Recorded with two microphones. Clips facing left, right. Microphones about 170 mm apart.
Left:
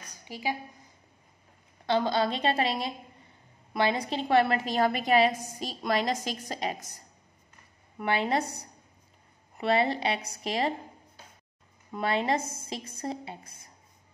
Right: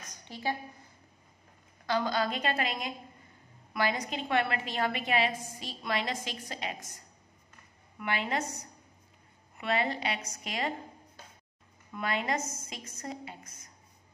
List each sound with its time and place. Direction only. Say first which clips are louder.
0.2 s a woman's voice: left 2 dB; 10° left (ahead or behind)
1.9 s a woman's voice: left 4 dB; 25° left (ahead or behind)
8.0 s a woman's voice: left 5 dB; 35° left (ahead or behind)
11.9 s a woman's voice: left 5 dB; 30° left (ahead or behind)